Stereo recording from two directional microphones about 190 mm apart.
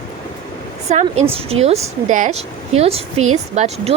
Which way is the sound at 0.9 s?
35° right (ahead or behind).